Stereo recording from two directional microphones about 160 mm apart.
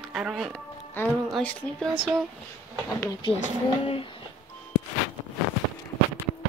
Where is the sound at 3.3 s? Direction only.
35° left (ahead or behind).